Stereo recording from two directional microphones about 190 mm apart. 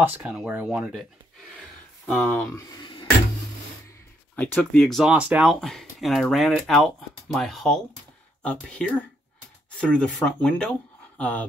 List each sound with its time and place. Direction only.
0.0 s speech: 10° right (ahead or behind)
2.0 s speech: 5° left (ahead or behind)
2.5 s speech: 25° left (ahead or behind)
4.4 s speech: 5° left (ahead or behind)